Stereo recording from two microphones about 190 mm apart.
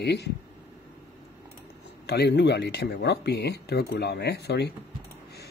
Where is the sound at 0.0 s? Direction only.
60° left (ahead or behind).